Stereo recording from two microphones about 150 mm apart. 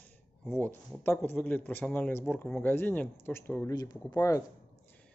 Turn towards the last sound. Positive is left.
turn(degrees=20)  # may be behind; listen again after turning